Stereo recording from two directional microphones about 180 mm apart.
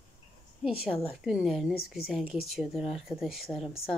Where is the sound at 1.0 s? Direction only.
5° right (ahead or behind).